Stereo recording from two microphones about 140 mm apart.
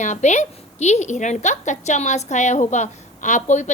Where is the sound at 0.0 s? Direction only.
55° left (ahead or behind).